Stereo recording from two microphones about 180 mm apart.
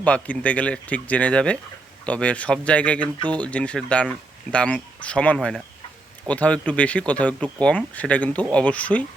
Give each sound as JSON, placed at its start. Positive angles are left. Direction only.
{"t": 0.0, "sound": "speech", "side_deg": 5}